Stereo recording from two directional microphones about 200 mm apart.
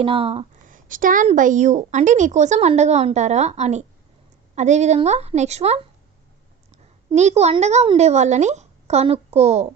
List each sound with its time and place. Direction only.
0.0 s a woman's voice: 30° right (ahead or behind)
7.1 s a woman's voice: 35° right (ahead or behind)